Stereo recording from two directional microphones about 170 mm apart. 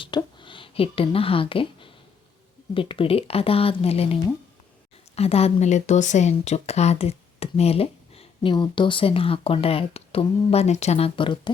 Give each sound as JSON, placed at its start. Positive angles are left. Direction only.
{"t": 0.0, "sound": "a woman's voice", "side_deg": 25}